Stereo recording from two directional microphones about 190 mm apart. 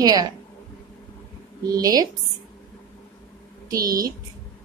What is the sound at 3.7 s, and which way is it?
Speech, 20° right (ahead or behind).